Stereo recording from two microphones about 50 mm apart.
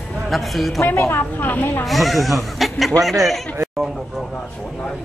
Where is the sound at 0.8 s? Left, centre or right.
Left.